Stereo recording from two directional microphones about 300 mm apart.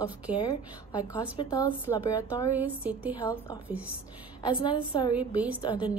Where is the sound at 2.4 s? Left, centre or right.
Centre.